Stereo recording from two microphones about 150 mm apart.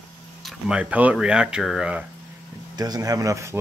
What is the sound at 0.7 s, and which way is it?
Speech, 10° right (ahead or behind).